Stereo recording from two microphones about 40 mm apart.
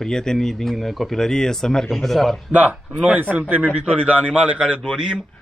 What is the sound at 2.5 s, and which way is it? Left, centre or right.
Speech, right.